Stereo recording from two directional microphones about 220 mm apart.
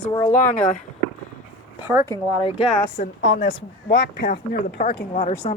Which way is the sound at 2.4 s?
25° left (ahead or behind).